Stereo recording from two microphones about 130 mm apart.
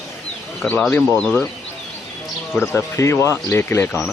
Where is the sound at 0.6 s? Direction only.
10° left (ahead or behind).